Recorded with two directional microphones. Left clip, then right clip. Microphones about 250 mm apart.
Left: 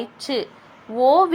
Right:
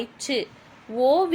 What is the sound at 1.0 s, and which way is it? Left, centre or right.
Speech, centre.